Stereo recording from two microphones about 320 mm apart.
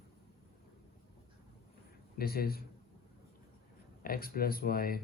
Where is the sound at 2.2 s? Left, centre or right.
Left.